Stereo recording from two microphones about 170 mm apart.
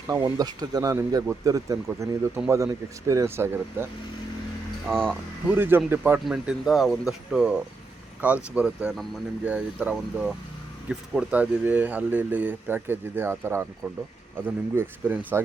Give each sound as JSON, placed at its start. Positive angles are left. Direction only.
{"t": 0.1, "sound": "speech", "side_deg": -20}
{"t": 4.9, "sound": "speech", "side_deg": 5}
{"t": 5.5, "sound": "speech", "side_deg": -10}